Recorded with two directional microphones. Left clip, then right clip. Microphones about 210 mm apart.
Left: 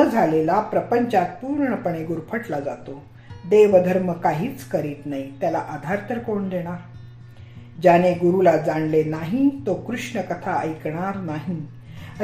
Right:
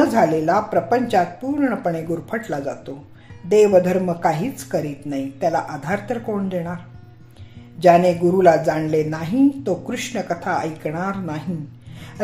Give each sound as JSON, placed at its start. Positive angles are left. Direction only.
{"t": 0.1, "sound": "a woman's voice", "side_deg": -35}
{"t": 7.8, "sound": "a woman's voice", "side_deg": -35}